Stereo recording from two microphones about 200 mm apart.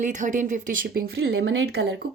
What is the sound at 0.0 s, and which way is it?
A woman's voice, 40° right (ahead or behind).